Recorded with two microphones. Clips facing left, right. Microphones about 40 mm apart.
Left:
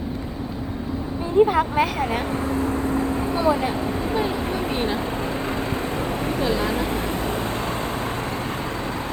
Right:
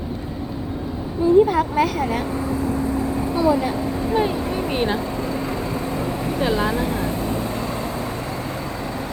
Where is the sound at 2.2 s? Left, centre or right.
Left.